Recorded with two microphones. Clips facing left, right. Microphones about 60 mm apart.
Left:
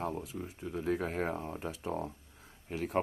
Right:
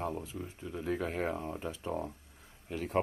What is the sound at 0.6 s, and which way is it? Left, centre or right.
Speech, left.